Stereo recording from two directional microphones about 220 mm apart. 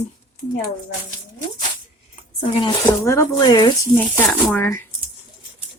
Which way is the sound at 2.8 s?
10° left (ahead or behind).